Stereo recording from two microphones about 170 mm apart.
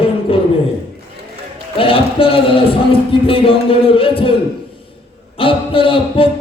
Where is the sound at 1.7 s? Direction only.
30° left (ahead or behind).